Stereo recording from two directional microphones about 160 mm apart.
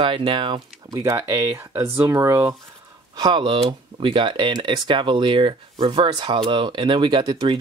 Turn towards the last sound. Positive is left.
turn(degrees=-25)  # may be behind; listen again after turning